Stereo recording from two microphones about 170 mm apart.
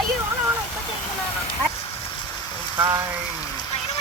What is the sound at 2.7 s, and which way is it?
Speech, 20° right (ahead or behind).